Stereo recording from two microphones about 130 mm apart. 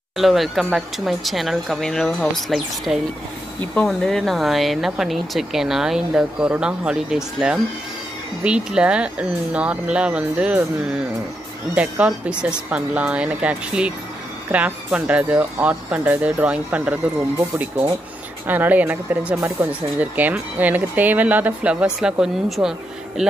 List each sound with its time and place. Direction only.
0.2 s speech: centre (ahead or behind)